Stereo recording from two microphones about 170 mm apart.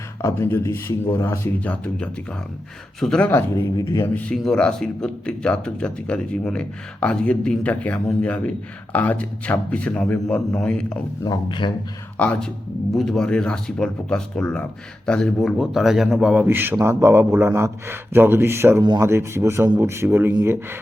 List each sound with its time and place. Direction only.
0.2 s speech: 15° left (ahead or behind)
11.2 s speech: 25° left (ahead or behind)
12.1 s a man's voice: 10° left (ahead or behind); by 20.6 s 15° right (ahead or behind)